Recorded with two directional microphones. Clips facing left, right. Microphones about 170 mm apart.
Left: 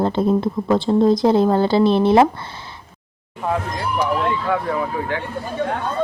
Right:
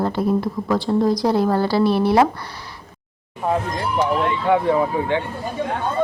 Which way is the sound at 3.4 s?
25° right (ahead or behind).